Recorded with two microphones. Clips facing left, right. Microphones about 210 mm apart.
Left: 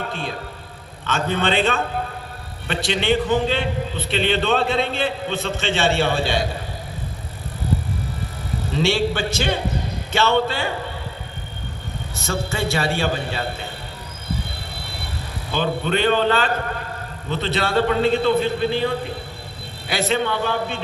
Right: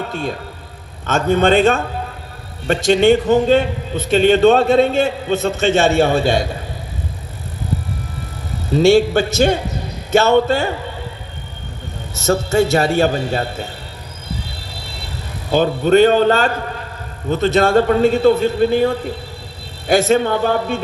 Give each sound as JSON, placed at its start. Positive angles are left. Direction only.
{"t": 0.1, "sound": "a man's voice", "side_deg": -45}
{"t": 8.7, "sound": "a man's voice", "side_deg": -45}
{"t": 12.1, "sound": "a man's voice", "side_deg": -45}
{"t": 15.5, "sound": "a man's voice", "side_deg": -45}